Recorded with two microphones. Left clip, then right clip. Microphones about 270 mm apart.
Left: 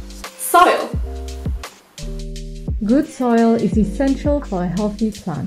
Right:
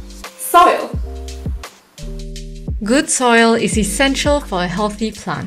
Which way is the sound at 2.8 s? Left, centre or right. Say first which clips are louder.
Right 3 dB; right.